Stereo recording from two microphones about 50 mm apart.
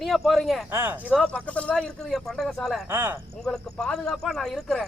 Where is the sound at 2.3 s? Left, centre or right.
Centre.